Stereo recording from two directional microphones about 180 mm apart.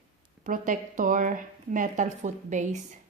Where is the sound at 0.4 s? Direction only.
45° right (ahead or behind).